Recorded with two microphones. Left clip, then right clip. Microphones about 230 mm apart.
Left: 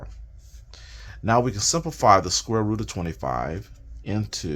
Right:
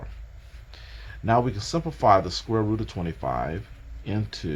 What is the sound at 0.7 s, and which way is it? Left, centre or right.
Speech, left.